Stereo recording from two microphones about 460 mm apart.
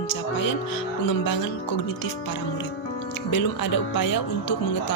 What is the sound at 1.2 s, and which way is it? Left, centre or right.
Speech, left.